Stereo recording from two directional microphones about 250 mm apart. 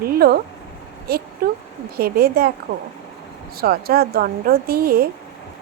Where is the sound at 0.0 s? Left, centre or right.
Right.